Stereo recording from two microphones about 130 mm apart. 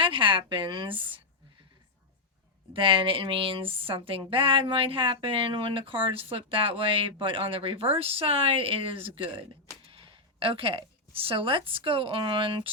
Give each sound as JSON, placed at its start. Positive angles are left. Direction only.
{"t": 0.0, "sound": "a woman's voice", "side_deg": -40}
{"t": 2.7, "sound": "a woman's voice", "side_deg": -40}